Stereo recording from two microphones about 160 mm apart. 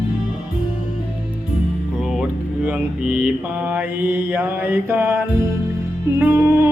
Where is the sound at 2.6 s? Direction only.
10° right (ahead or behind).